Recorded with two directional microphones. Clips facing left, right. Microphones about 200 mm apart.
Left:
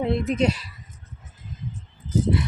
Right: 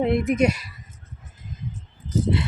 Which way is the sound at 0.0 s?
15° right (ahead or behind).